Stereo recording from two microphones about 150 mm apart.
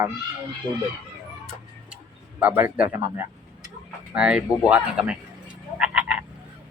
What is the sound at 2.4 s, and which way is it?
Speech, 10° right (ahead or behind).